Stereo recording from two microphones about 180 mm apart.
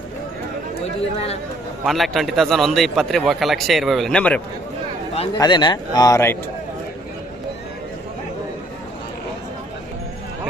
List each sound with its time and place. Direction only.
1.1 s speech: 35° left (ahead or behind)
1.8 s a man's voice: centre (ahead or behind)
5.1 s a man's voice: 35° left (ahead or behind); by 6.3 s 15° left (ahead or behind)